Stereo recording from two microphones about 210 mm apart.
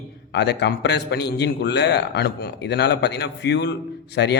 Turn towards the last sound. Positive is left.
turn(degrees=55)  # may be behind; listen again after turning